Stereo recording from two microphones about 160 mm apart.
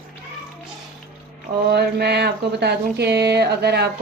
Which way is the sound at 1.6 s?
90° right.